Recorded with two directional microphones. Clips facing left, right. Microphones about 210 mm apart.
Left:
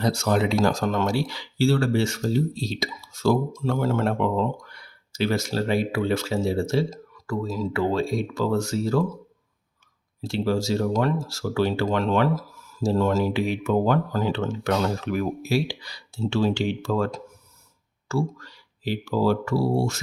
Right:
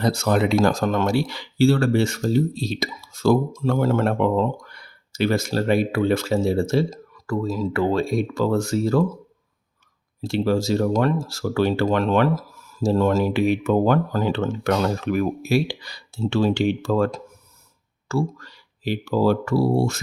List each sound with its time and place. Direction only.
0.0 s speech: 55° right (ahead or behind)
10.2 s speech: 55° right (ahead or behind)